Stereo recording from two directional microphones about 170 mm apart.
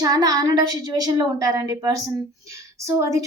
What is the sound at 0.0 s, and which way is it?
A woman's voice, 25° right (ahead or behind).